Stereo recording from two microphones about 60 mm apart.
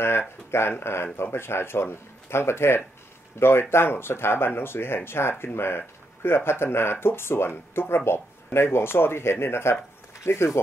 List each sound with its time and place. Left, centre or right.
0.5 s speech: left